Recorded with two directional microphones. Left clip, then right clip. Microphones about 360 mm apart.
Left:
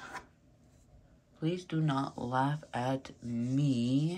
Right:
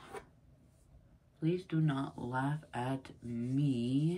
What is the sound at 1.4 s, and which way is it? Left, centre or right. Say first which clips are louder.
Speech: left 1 dB; centre.